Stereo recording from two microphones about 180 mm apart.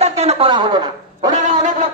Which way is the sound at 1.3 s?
40° right (ahead or behind).